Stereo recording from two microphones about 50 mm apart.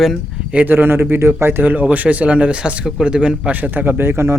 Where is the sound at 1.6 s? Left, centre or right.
Right; by 3.5 s centre.